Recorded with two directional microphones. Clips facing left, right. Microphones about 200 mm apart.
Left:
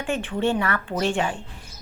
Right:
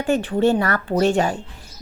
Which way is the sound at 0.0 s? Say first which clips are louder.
Right 6 dB; 40° right (ahead or behind).